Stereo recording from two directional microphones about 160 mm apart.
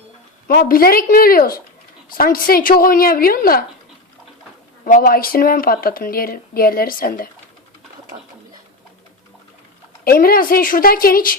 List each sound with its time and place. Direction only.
0.4 s speech: 65° left (ahead or behind)
4.9 s speech: 60° left (ahead or behind)
10.0 s speech: 70° left (ahead or behind)